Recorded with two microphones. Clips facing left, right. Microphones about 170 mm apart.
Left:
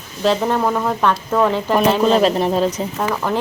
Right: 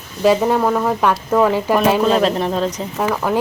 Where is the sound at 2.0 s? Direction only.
Centre (ahead or behind).